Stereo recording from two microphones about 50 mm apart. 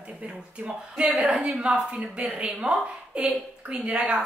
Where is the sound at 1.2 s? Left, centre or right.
Centre.